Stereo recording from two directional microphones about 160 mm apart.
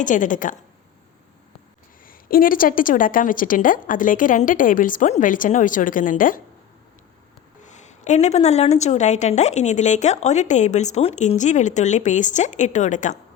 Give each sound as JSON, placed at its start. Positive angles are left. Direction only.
{"t": 0.0, "sound": "a woman's voice", "side_deg": 55}
{"t": 2.0, "sound": "a woman's voice", "side_deg": 60}
{"t": 7.6, "sound": "a woman's voice", "side_deg": 50}